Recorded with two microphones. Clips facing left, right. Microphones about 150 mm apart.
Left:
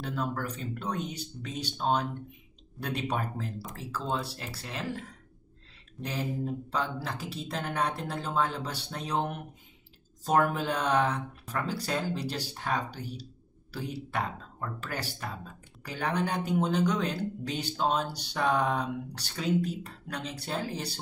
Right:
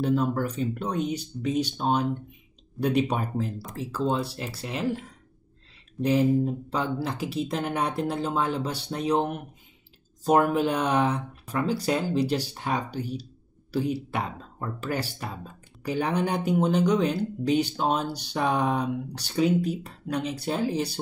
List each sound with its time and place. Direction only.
0.0 s speech: 15° right (ahead or behind)
6.7 s speech: 15° right (ahead or behind)